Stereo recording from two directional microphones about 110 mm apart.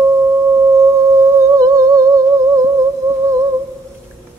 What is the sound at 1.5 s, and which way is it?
Humming, 30° right (ahead or behind).